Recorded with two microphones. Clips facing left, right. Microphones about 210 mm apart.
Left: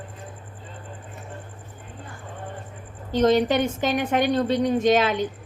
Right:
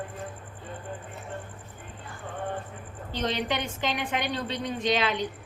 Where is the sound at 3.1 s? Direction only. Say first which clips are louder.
Left 11 dB; 45° left (ahead or behind).